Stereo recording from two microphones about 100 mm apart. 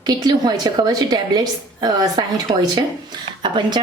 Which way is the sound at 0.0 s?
45° right (ahead or behind).